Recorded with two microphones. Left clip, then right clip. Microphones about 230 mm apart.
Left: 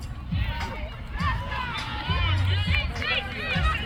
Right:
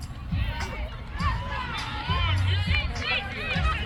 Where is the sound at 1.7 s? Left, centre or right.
Centre.